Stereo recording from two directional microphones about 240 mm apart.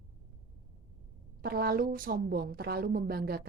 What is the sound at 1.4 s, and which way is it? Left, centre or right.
A woman's voice, right.